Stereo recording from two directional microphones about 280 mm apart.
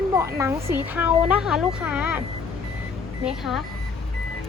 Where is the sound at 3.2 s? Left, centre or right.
Centre.